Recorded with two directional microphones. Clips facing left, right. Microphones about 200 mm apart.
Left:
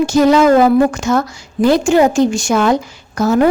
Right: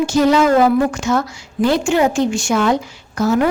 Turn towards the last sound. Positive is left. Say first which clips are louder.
# left 3 dB
turn(degrees=45)  # may be behind; listen again after turning